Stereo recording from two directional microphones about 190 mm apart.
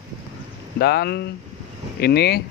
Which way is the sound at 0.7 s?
60° left (ahead or behind).